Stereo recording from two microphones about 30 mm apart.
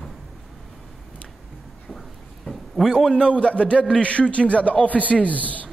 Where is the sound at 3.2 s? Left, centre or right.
Left.